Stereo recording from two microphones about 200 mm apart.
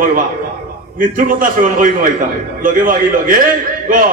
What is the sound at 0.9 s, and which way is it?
A man's voice, 40° right (ahead or behind).